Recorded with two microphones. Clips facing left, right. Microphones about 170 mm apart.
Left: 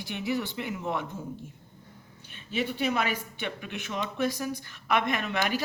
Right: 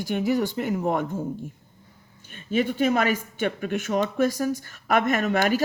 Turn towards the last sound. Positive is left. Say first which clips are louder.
# right 7 dB
turn(degrees=-45)  # may be behind; listen again after turning